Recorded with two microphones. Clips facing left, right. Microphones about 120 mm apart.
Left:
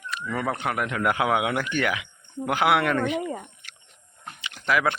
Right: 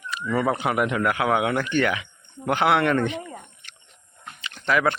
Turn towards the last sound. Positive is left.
turn(degrees=5)  # may be behind; listen again after turning